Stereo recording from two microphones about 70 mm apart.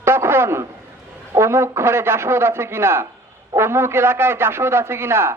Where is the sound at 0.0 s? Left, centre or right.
Right.